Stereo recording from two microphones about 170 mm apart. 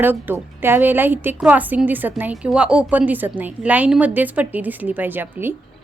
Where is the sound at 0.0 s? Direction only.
10° right (ahead or behind).